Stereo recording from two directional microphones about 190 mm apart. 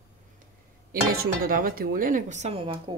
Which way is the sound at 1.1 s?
50° right (ahead or behind).